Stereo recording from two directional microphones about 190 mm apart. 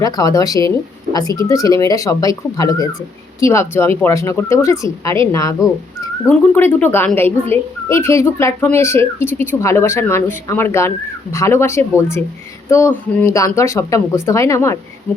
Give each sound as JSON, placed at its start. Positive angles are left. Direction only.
{"t": 0.0, "sound": "speech", "side_deg": 20}